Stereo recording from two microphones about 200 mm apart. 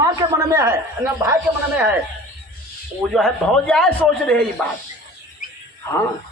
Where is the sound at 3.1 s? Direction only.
Centre (ahead or behind).